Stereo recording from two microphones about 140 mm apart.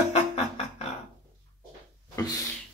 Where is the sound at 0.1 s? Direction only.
50° left (ahead or behind).